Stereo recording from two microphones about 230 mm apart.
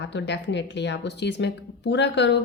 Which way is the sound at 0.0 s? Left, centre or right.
Left.